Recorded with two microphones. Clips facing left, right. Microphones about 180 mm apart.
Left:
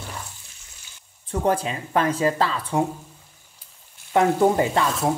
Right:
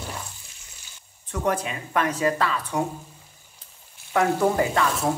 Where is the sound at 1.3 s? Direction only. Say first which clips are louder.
Left 3 dB; 30° left (ahead or behind).